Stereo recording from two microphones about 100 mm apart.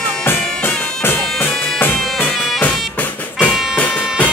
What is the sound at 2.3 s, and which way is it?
Music, 5° left (ahead or behind).